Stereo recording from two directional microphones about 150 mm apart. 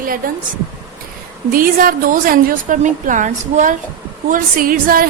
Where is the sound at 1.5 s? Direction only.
70° right (ahead or behind).